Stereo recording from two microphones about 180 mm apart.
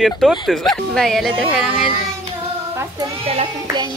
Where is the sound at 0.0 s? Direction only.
Centre (ahead or behind).